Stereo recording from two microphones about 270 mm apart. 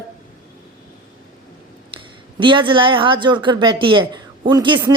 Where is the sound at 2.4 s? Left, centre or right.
Centre.